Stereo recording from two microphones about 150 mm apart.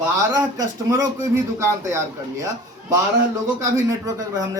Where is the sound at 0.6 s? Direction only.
25° right (ahead or behind).